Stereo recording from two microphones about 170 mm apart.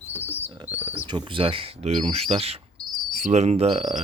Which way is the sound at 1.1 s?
30° right (ahead or behind).